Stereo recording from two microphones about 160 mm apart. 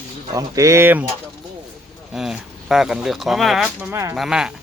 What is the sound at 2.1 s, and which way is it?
Speech, centre (ahead or behind).